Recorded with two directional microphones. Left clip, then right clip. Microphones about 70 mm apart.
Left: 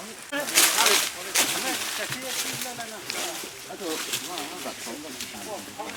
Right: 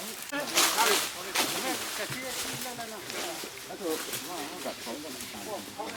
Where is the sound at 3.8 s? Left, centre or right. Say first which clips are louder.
Left 3 dB; left.